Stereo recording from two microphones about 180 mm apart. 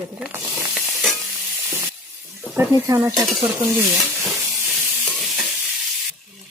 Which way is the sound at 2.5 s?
15° right (ahead or behind).